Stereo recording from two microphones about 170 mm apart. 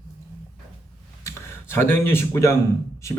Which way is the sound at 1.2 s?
15° left (ahead or behind).